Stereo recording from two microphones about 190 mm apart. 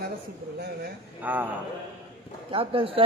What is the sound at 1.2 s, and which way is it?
Speech, 10° right (ahead or behind).